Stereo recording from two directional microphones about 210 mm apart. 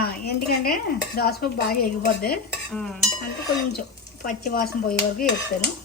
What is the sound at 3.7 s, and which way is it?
Dishes, 45° left (ahead or behind).